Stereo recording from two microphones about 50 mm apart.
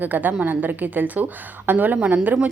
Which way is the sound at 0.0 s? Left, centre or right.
Right.